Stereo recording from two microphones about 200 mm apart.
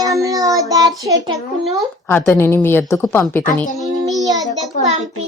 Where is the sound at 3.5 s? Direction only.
Centre (ahead or behind).